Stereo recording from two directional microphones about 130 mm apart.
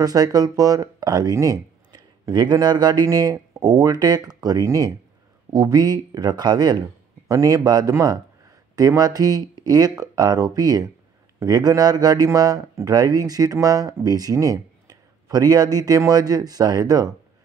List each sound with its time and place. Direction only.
0.0 s speech: 30° right (ahead or behind)